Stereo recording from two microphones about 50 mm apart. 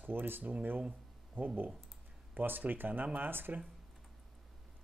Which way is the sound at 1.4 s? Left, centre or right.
Right.